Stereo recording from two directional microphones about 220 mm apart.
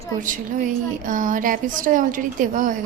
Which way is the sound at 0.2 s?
35° right (ahead or behind).